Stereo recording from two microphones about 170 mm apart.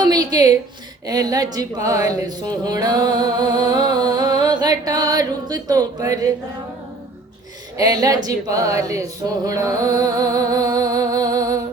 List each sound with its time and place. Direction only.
0.0 s a sound: 25° right (ahead or behind)
1.0 s speech: 20° right (ahead or behind)
7.8 s speech: 20° right (ahead or behind)